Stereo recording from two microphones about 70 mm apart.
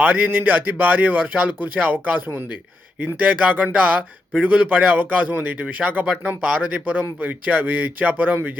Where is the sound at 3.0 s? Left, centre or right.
Centre.